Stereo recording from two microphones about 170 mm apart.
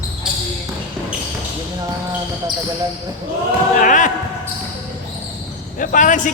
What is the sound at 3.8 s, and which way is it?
Speech, 50° left (ahead or behind).